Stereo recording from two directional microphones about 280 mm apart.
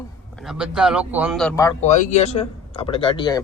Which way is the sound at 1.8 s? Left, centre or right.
Left.